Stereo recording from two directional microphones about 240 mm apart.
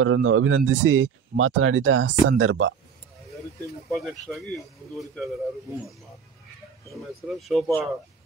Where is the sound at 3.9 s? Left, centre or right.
Centre.